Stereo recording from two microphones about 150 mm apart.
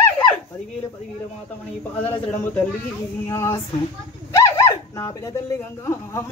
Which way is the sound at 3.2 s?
20° left (ahead or behind).